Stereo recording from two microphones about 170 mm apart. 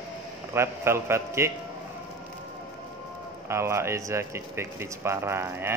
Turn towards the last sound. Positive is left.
turn(degrees=-15)  # may be behind; listen again after turning